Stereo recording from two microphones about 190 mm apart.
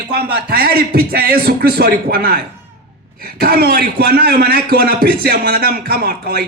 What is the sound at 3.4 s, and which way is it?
Speech, 50° right (ahead or behind).